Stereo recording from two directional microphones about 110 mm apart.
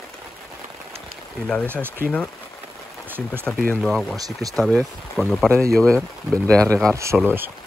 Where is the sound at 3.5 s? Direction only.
5° left (ahead or behind).